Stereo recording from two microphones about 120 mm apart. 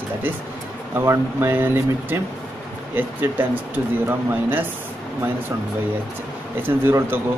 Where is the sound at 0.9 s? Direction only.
20° right (ahead or behind).